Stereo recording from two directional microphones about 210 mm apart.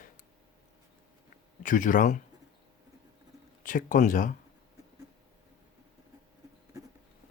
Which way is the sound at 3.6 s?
40° left (ahead or behind).